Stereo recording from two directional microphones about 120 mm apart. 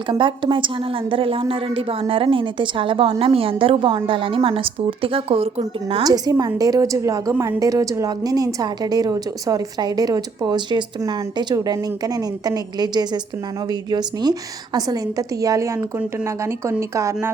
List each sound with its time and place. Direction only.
0.1 s a woman's voice: 45° right (ahead or behind)
6.0 s a woman's voice: 30° right (ahead or behind)
16.9 s a woman's voice: 25° right (ahead or behind)